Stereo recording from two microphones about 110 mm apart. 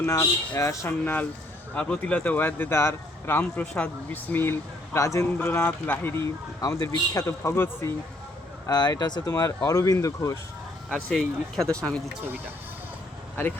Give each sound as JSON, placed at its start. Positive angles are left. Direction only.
{"t": 0.0, "sound": "speech", "side_deg": 25}
{"t": 4.9, "sound": "speech", "side_deg": 30}
{"t": 5.4, "sound": "speech", "side_deg": 20}
{"t": 6.6, "sound": "speech", "side_deg": 35}
{"t": 8.6, "sound": "speech", "side_deg": 35}
{"t": 10.8, "sound": "speech", "side_deg": 10}